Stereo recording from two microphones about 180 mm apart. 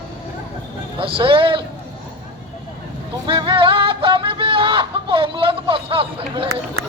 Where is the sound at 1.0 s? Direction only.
30° right (ahead or behind).